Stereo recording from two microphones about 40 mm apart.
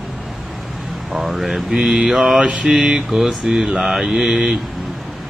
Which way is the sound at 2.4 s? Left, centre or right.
Right.